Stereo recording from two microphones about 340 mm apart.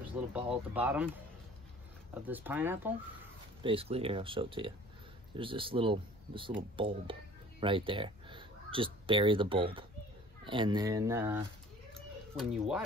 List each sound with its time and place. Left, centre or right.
0.5 s speech: centre
2.2 s speech: centre
3.6 s speech: centre
11.9 s cat: centre